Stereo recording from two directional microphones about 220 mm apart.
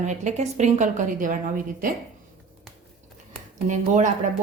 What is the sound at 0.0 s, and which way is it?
Speech, 30° right (ahead or behind).